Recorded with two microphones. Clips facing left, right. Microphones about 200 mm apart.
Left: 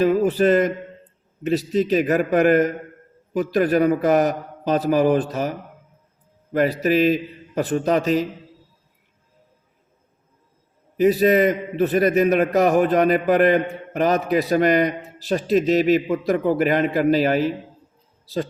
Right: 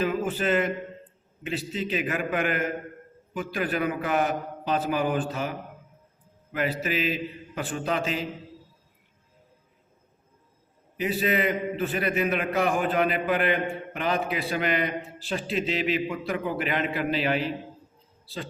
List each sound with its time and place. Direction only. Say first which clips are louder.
0.0 s a sound: left 9 dB; 40° left (ahead or behind)
1.5 s a man's voice: left 11 dB; 40° left (ahead or behind)
10.9 s a man's voice: left 10 dB; 40° left (ahead or behind)